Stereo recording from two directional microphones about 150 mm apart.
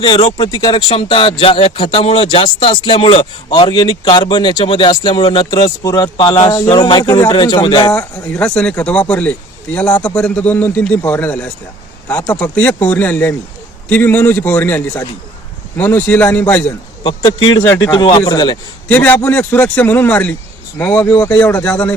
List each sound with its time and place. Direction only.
0.3 s speech: 30° left (ahead or behind)
7.9 s speech: 10° left (ahead or behind)
17.0 s speech: 30° left (ahead or behind)
18.9 s speech: 10° left (ahead or behind)